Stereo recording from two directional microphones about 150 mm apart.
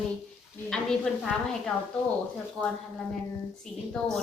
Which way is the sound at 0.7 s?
5° left (ahead or behind).